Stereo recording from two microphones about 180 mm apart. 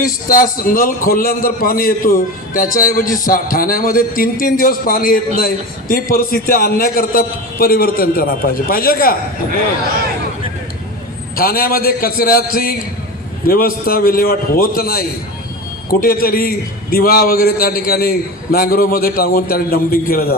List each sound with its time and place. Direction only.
0.0 s a man's voice: 50° left (ahead or behind)
11.3 s a man's voice: 55° left (ahead or behind)